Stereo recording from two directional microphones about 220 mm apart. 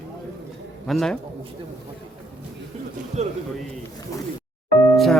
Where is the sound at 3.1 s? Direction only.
30° right (ahead or behind).